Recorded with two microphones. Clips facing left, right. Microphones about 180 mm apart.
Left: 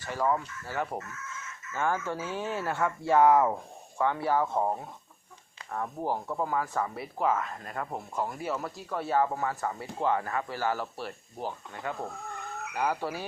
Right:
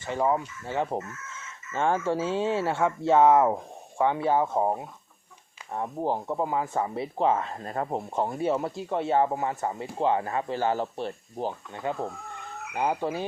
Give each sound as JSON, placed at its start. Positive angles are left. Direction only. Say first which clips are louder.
{"t": 0.0, "sound": "speech", "louder": "right 3 dB", "side_deg": -20}